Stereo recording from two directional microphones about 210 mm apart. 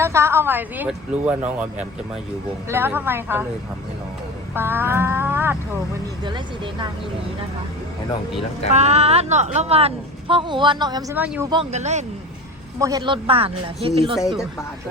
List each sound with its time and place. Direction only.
0.0 s a woman's voice: 10° right (ahead or behind)
4.5 s music: 10° right (ahead or behind)
6.2 s a woman's voice: 20° right (ahead or behind)
8.7 s a woman's voice: 30° right (ahead or behind)
11.1 s a woman's voice: 10° right (ahead or behind)
11.5 s speech: 30° right (ahead or behind)
12.8 s a woman's voice: 20° right (ahead or behind)